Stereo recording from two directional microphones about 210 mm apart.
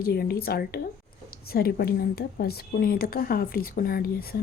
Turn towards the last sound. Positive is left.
turn(degrees=45)  # may be behind; listen again after turning